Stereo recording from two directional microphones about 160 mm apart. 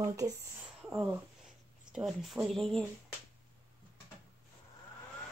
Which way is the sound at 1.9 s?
Centre (ahead or behind).